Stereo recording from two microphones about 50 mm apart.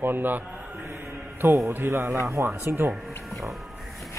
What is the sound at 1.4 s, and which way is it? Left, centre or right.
Speech, right.